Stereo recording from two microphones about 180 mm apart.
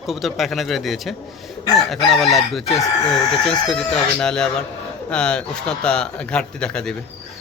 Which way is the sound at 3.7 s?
5° left (ahead or behind).